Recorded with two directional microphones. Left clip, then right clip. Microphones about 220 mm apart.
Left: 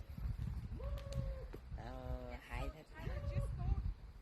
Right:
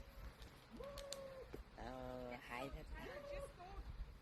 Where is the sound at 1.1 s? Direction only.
45° right (ahead or behind).